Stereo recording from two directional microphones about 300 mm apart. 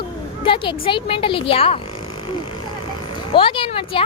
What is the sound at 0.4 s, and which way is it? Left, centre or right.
A woman's voice, centre.